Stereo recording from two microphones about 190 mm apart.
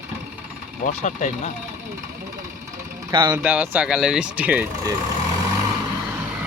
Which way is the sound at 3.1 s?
25° right (ahead or behind).